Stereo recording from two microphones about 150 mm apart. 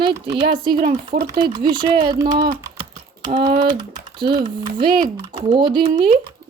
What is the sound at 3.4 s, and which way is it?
Speech, 90° right.